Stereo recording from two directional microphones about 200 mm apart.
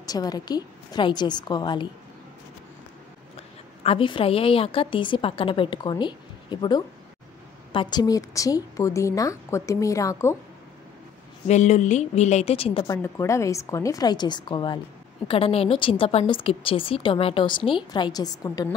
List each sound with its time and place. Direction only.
0.0 s a woman's voice: 20° left (ahead or behind)
3.3 s a woman's voice: 30° left (ahead or behind)
11.4 s a woman's voice: 35° left (ahead or behind); by 18.7 s 20° left (ahead or behind)